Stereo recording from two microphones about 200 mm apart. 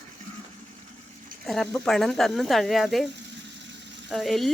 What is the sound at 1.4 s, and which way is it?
Speech, centre (ahead or behind).